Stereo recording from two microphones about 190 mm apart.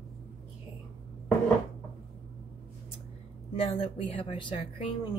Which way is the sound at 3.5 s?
30° left (ahead or behind).